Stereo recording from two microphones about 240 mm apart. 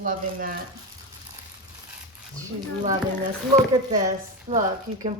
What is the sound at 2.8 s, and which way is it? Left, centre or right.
Speech, right.